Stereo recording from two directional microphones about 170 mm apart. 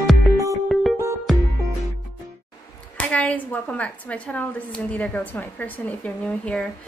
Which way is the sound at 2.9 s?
10° left (ahead or behind).